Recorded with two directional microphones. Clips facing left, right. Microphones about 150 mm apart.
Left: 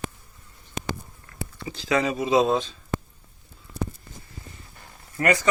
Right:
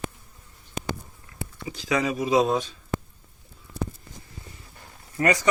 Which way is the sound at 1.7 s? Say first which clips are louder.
Left 1 dB; 10° right (ahead or behind).